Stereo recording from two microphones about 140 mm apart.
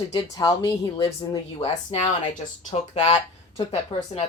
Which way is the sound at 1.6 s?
50° left (ahead or behind).